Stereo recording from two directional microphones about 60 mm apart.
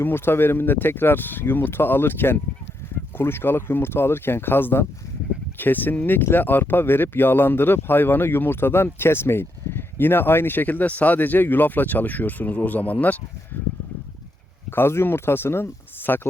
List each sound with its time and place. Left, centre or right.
0.0 s speech: left
14.8 s speech: left